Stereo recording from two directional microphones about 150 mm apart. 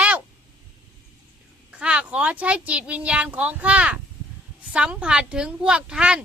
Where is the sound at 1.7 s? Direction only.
5° right (ahead or behind).